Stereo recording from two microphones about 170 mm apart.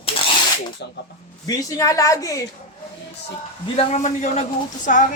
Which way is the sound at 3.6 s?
35° left (ahead or behind).